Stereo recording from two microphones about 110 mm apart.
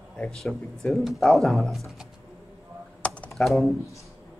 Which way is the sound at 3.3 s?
Centre (ahead or behind).